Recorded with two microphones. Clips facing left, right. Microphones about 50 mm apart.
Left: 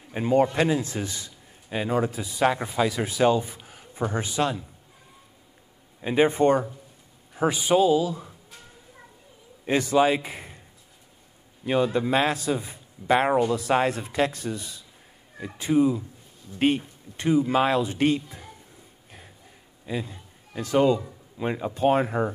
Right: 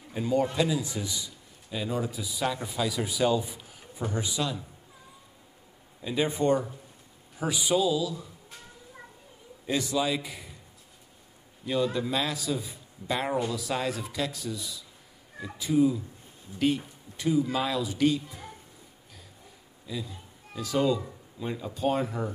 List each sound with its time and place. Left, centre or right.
0.1 s a man's voice: left
3.0 s speech: left
3.6 s a sound: left
6.0 s a man's voice: left
9.9 s a man's voice: left
11.6 s a man's voice: left
19.9 s a man's voice: left